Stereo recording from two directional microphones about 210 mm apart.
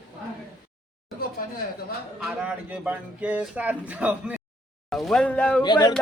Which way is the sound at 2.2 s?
5° right (ahead or behind).